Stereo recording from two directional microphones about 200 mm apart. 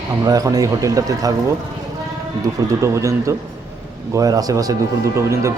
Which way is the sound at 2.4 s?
15° right (ahead or behind).